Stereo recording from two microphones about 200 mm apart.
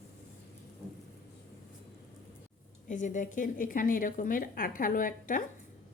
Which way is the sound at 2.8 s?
40° left (ahead or behind).